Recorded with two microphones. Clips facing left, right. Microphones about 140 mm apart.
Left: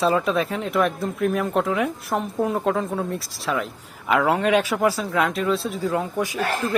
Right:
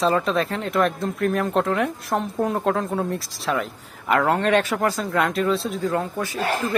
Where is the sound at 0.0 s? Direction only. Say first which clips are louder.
Even; 5° left (ahead or behind).